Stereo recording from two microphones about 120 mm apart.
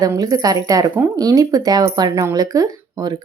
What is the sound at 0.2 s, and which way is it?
Speech, 30° right (ahead or behind).